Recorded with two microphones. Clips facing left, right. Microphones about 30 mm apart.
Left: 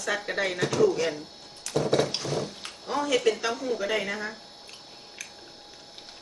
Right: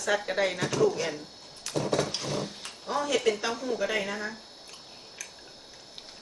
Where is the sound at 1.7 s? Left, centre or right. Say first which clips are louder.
Left 3 dB; centre.